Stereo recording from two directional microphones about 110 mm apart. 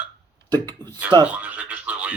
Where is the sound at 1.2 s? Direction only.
10° right (ahead or behind).